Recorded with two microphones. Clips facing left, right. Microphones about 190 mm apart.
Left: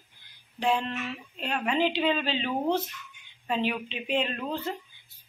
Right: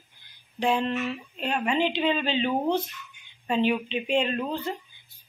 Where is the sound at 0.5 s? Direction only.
Centre (ahead or behind).